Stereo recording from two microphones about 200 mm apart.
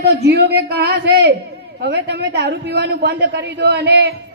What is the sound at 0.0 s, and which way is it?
A man's voice, 55° right (ahead or behind).